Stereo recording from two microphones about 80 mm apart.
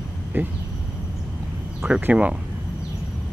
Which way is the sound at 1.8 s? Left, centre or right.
Right.